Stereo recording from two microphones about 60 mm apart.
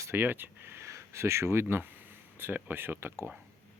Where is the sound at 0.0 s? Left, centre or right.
Right.